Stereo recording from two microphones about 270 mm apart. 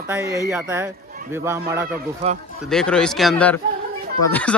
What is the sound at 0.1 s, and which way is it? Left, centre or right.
Speech, centre.